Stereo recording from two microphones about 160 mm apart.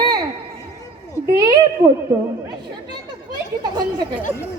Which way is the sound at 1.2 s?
25° right (ahead or behind).